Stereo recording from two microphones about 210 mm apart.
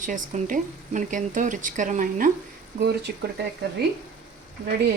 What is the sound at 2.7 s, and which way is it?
Speech, 50° right (ahead or behind).